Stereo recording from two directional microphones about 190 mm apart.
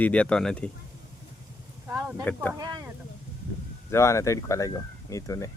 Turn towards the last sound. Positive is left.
turn(degrees=15)  # may be behind; listen again after turning